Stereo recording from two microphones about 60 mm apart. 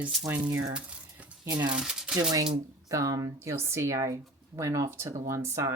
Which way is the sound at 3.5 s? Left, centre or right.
Right.